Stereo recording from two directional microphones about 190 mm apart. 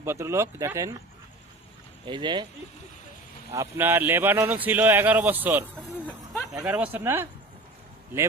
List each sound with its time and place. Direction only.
0.0 s speech: 15° right (ahead or behind)
2.0 s speech: 25° right (ahead or behind)
3.5 s speech: 15° right (ahead or behind)